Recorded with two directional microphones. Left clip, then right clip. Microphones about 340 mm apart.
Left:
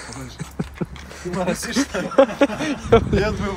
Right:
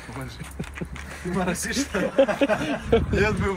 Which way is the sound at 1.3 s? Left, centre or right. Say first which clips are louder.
Left 4 dB; centre.